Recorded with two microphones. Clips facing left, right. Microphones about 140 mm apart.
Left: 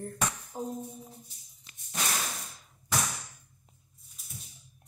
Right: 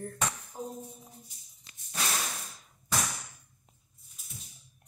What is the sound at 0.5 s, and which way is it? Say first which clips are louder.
Music: left 4 dB; 30° left (ahead or behind).